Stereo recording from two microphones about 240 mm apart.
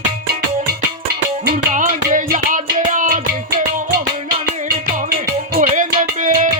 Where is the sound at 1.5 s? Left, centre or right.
Right.